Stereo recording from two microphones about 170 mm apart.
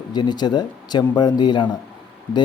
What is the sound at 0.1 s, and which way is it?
Speech, 25° left (ahead or behind).